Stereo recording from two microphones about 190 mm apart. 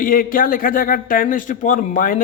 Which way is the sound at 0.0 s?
45° left (ahead or behind).